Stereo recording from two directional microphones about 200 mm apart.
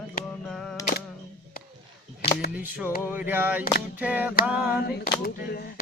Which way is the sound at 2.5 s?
10° right (ahead or behind).